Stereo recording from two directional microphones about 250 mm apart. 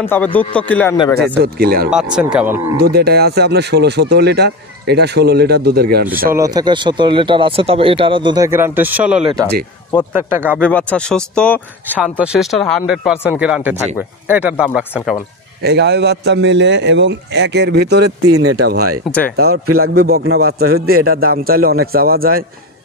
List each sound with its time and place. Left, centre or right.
0.0 s speech: centre
1.4 s speech: right
1.9 s speech: centre
2.9 s speech: right
6.3 s speech: centre
10.6 s speech: centre
15.6 s a man's voice: right
18.3 s speech: right
18.6 s speech: right
19.6 s a man's voice: right
19.9 s speech: right